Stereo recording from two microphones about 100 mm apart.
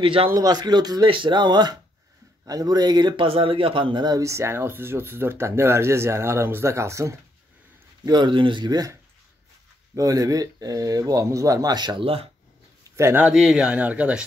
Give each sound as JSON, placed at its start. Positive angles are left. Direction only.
{"t": 0.0, "sound": "a man's voice", "side_deg": -65}
{"t": 0.3, "sound": "speech", "side_deg": -40}
{"t": 1.0, "sound": "speech", "side_deg": -55}
{"t": 8.0, "sound": "speech", "side_deg": -45}
{"t": 9.9, "sound": "speech", "side_deg": -35}
{"t": 12.0, "sound": "speech", "side_deg": -70}
{"t": 12.8, "sound": "a sound", "side_deg": -30}
{"t": 13.2, "sound": "a man's voice", "side_deg": -5}